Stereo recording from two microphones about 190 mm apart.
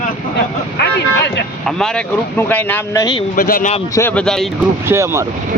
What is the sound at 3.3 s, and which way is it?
Speech, 50° left (ahead or behind).